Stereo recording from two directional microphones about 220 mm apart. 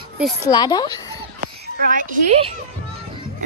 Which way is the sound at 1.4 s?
40° right (ahead or behind).